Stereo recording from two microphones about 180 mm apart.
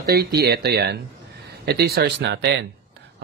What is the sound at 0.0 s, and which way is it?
Speech, 60° right (ahead or behind).